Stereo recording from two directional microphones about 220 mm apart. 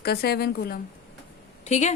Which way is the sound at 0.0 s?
45° left (ahead or behind).